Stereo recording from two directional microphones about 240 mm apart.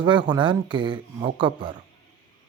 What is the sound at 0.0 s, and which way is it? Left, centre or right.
Speech, centre.